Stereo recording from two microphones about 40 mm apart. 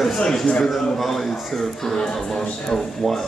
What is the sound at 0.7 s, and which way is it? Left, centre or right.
A man's voice, centre.